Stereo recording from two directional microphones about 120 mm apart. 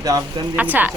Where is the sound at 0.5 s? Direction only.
15° right (ahead or behind).